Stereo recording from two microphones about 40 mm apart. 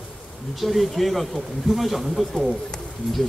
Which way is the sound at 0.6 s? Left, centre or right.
Centre.